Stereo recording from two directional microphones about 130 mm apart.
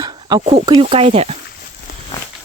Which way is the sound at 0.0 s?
35° right (ahead or behind).